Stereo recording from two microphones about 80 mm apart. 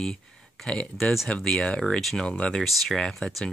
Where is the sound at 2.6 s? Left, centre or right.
Centre.